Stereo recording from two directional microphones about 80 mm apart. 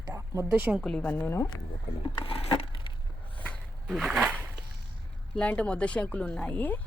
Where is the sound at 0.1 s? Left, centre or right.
Right.